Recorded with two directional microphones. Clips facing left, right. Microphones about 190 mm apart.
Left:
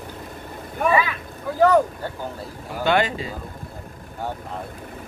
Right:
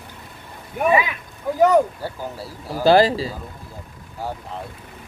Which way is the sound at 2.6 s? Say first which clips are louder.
Right 6 dB; 35° right (ahead or behind).